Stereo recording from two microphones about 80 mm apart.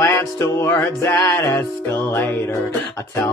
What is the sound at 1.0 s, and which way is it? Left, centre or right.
Music, left.